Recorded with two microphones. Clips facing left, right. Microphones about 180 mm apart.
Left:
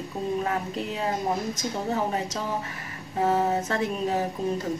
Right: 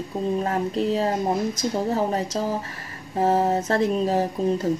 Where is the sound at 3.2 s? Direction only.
40° right (ahead or behind).